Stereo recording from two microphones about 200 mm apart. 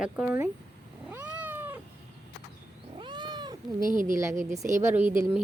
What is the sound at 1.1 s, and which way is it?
Cat, 10° right (ahead or behind).